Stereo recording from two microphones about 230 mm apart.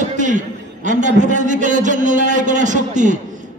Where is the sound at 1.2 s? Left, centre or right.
Right.